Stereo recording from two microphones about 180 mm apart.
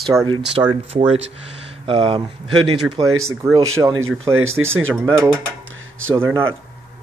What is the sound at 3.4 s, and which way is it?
Speech, 15° right (ahead or behind).